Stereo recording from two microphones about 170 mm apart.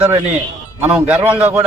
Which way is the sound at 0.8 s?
10° right (ahead or behind).